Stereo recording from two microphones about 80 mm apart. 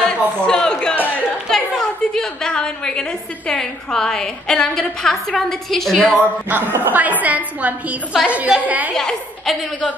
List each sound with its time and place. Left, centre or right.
0.0 s a sound: centre
1.5 s a woman's voice: centre
6.5 s a woman's voice: right
8.9 s a woman's voice: centre